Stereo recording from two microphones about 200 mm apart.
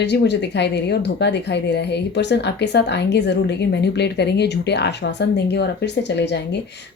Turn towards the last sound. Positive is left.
turn(degrees=60)  # may be behind; listen again after turning